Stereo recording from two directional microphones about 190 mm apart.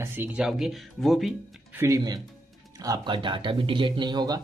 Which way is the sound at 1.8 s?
20° right (ahead or behind).